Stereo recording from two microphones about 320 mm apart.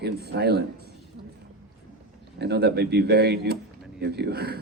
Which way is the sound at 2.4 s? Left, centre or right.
Right.